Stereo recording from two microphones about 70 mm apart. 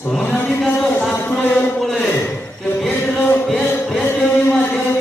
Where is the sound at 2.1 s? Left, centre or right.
Left.